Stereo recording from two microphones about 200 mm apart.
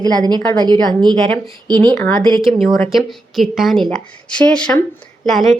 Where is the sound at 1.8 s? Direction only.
5° left (ahead or behind).